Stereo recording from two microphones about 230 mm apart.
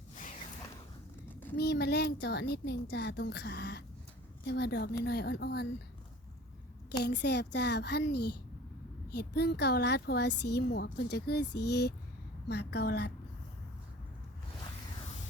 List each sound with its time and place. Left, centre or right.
1.3 s a sound: centre
1.5 s speech: left
7.0 s speech: left